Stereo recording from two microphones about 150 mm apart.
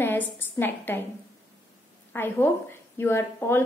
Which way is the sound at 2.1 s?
15° left (ahead or behind).